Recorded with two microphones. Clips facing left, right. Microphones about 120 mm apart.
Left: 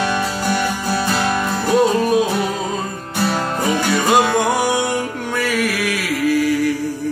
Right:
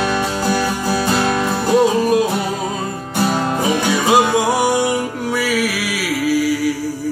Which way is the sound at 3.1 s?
15° right (ahead or behind).